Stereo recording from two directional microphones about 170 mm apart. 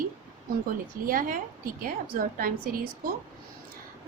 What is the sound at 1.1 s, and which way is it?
Speech, 55° right (ahead or behind).